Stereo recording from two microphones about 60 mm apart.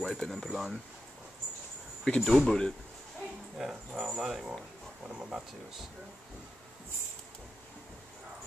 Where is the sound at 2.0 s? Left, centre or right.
Centre.